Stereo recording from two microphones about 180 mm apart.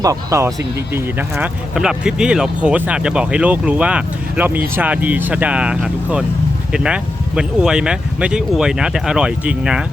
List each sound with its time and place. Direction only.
0.0 s speech: 20° right (ahead or behind)
0.9 s speech: 5° right (ahead or behind)